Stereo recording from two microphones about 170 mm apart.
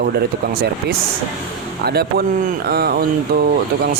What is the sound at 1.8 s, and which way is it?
Speech, 65° right (ahead or behind).